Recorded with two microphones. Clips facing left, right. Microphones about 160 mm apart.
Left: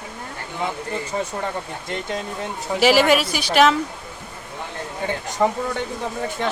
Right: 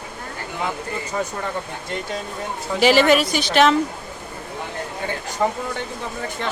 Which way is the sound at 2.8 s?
5° left (ahead or behind).